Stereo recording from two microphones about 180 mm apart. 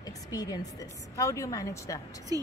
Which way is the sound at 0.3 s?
20° left (ahead or behind).